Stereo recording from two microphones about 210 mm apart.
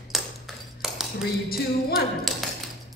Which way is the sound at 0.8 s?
Centre (ahead or behind).